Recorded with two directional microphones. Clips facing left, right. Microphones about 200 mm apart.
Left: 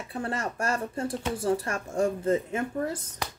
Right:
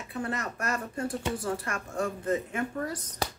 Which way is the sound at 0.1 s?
30° left (ahead or behind).